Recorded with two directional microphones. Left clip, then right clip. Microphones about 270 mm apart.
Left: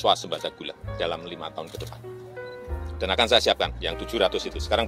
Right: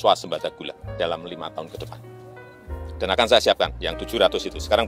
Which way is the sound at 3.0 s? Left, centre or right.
Right.